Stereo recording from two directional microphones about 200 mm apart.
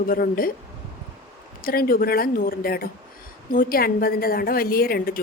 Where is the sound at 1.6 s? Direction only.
45° left (ahead or behind).